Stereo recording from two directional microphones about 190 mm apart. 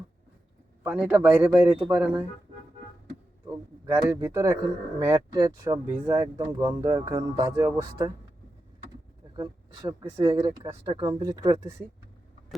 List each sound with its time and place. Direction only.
0.9 s speech: 5° right (ahead or behind)
3.9 s speech: 15° right (ahead or behind)
10.0 s speech: 15° right (ahead or behind)